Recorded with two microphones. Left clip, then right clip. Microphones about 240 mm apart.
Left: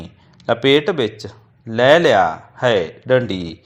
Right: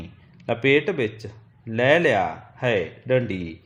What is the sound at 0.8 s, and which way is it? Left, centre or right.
Speech, centre.